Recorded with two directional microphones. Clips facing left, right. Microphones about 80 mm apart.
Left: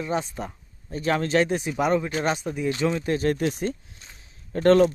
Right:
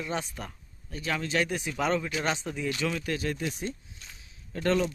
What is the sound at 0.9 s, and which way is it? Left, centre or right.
Speech, left.